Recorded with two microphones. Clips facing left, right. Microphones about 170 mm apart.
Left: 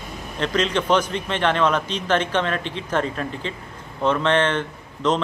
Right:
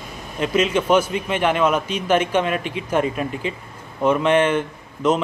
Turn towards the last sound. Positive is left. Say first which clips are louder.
# right 2 dB
turn(degrees=-10)  # may be behind; listen again after turning